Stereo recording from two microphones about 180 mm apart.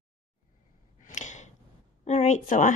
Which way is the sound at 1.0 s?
40° left (ahead or behind).